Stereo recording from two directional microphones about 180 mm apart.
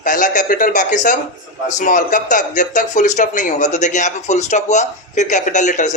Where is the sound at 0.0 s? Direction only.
45° left (ahead or behind).